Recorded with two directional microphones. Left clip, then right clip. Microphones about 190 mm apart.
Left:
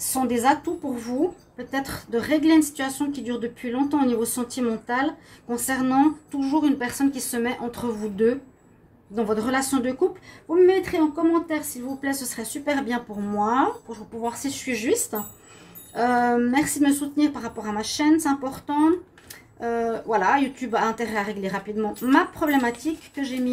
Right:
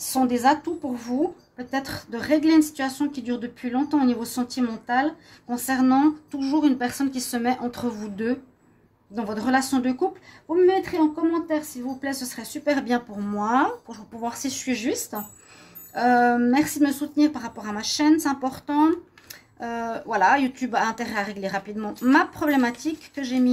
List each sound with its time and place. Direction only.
0.0 s a woman's voice: 45° right (ahead or behind)